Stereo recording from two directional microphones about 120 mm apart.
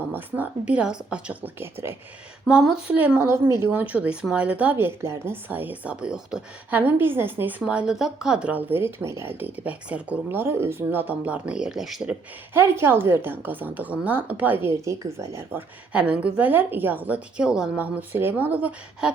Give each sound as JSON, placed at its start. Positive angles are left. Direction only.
{"t": 0.7, "sound": "speech", "side_deg": -10}
{"t": 2.5, "sound": "speech", "side_deg": -5}
{"t": 6.7, "sound": "speech", "side_deg": -15}
{"t": 7.6, "sound": "speech", "side_deg": -5}
{"t": 12.5, "sound": "speech", "side_deg": -20}
{"t": 15.9, "sound": "speech", "side_deg": -10}